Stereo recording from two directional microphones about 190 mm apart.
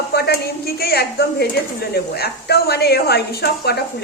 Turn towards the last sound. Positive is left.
turn(degrees=60)  # may be behind; listen again after turning